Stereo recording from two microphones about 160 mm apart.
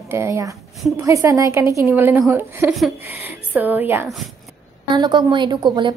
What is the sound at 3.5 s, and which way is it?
Speech, 10° right (ahead or behind).